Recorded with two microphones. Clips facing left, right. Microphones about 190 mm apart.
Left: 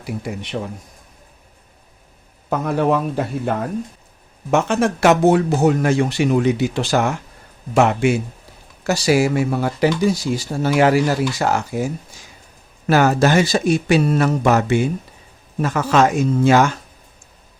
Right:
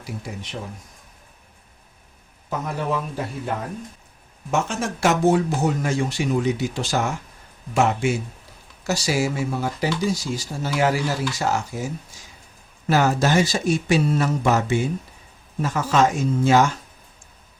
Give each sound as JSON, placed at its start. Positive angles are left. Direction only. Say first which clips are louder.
{"t": 2.5, "sound": "speech", "louder": "left 8 dB", "side_deg": 65}
{"t": 4.5, "sound": "speech", "louder": "left 7 dB", "side_deg": 65}
{"t": 12.9, "sound": "speech", "louder": "left 4 dB", "side_deg": 65}